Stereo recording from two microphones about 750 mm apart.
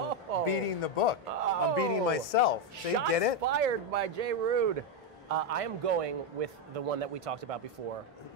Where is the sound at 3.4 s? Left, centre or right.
Right.